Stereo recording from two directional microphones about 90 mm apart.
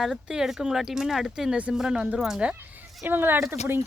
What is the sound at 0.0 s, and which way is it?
Speech, 5° right (ahead or behind).